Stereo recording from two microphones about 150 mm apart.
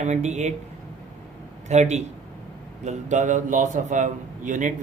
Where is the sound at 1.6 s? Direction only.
50° right (ahead or behind).